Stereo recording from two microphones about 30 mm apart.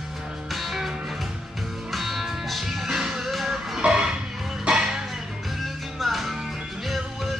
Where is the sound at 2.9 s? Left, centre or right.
Centre.